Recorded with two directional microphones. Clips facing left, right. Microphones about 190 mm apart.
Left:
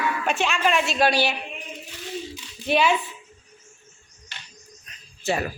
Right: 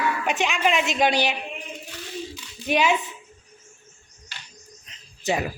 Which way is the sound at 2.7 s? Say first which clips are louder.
Left 1 dB; 15° right (ahead or behind).